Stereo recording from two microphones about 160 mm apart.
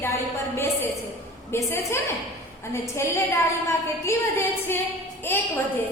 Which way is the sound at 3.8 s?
15° left (ahead or behind).